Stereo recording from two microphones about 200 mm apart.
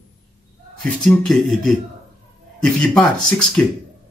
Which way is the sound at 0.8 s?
5° left (ahead or behind).